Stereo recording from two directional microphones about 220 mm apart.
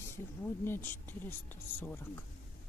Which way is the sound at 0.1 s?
10° left (ahead or behind).